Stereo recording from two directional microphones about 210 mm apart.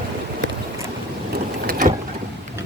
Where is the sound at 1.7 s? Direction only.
40° right (ahead or behind).